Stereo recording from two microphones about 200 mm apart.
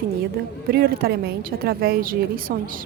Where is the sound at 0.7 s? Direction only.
50° right (ahead or behind).